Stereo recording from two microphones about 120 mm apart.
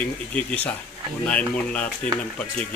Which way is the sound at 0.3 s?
10° left (ahead or behind).